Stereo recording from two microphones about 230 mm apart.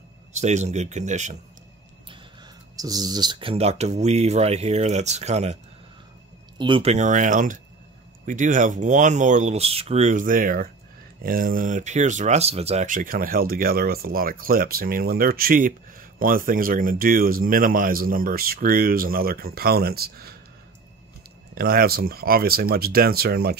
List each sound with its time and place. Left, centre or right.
0.3 s speech: right
2.7 s speech: centre
6.6 s speech: right
21.5 s speech: right